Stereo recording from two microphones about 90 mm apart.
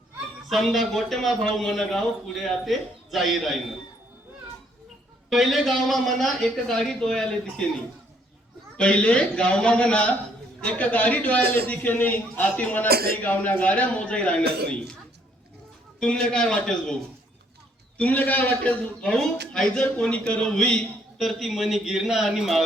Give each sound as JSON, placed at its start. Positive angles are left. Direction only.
{"t": 0.4, "sound": "a man's voice", "side_deg": 0}
{"t": 5.3, "sound": "a man's voice", "side_deg": 0}
{"t": 8.8, "sound": "a man's voice", "side_deg": 10}
{"t": 16.0, "sound": "a man's voice", "side_deg": 10}